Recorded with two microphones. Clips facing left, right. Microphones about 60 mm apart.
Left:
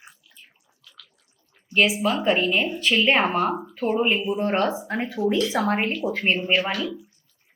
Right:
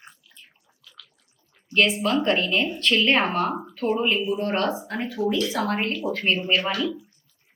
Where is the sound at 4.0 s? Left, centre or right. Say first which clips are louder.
Left 1 dB; centre.